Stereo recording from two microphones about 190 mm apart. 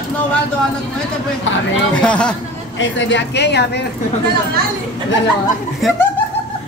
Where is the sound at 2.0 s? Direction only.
5° left (ahead or behind).